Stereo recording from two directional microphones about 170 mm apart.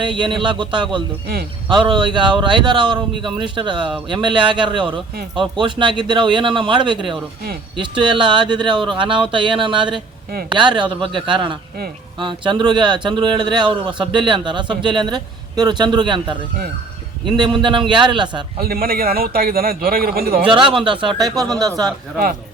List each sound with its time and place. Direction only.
0.0 s a man's voice: 30° right (ahead or behind)
17.2 s a man's voice: 25° right (ahead or behind)
18.6 s a man's voice: 60° right (ahead or behind)
20.5 s a man's voice: 30° right (ahead or behind)